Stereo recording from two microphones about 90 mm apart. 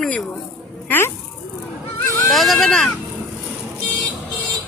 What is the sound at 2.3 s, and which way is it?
Speech, centre (ahead or behind).